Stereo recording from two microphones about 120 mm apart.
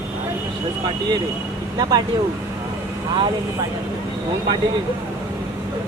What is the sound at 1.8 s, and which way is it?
Speech, 35° right (ahead or behind).